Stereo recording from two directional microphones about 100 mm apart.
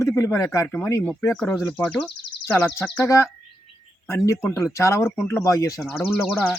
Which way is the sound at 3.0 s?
30° left (ahead or behind).